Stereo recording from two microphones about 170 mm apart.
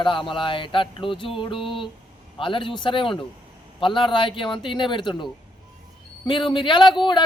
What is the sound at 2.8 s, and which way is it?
Male singing, 30° left (ahead or behind).